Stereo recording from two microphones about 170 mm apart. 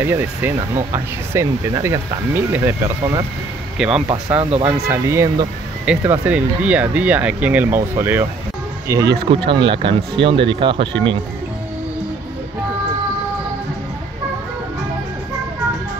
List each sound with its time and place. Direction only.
0.0 s speech: 10° right (ahead or behind)
4.4 s speech: 40° right (ahead or behind)
4.6 s speech: 15° right (ahead or behind)
9.5 s speech: 30° right (ahead or behind)